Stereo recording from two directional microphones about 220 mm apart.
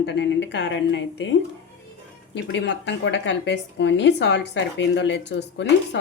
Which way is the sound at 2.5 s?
55° left (ahead or behind).